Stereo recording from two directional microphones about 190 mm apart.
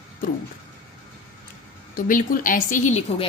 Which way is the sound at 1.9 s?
45° left (ahead or behind).